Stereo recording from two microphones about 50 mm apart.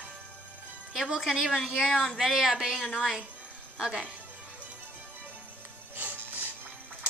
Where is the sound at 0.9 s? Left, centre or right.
Centre.